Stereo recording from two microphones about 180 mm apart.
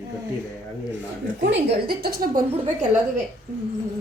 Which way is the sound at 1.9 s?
55° right (ahead or behind).